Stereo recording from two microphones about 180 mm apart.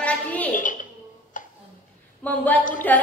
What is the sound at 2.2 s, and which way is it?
Speech, 10° left (ahead or behind).